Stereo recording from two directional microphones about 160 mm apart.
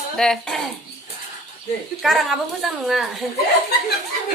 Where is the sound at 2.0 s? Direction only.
Centre (ahead or behind).